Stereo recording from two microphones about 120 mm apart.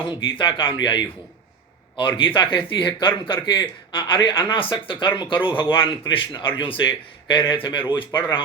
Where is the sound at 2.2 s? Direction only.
45° left (ahead or behind).